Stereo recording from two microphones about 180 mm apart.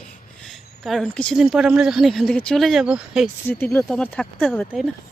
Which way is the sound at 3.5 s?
10° left (ahead or behind).